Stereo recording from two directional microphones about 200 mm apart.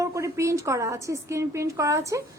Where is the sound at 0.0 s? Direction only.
15° right (ahead or behind).